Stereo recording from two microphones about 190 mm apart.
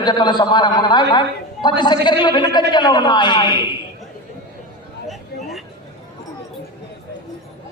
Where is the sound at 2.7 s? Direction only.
25° left (ahead or behind).